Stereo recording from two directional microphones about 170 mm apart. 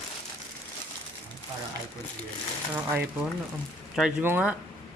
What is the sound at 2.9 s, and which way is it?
Speech, 10° right (ahead or behind).